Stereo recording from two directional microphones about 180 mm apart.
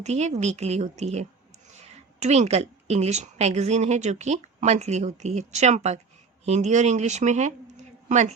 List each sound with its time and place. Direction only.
0.0 s a woman's voice: 40° right (ahead or behind)